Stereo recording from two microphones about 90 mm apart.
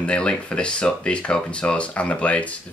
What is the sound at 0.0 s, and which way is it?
Speech, 15° left (ahead or behind).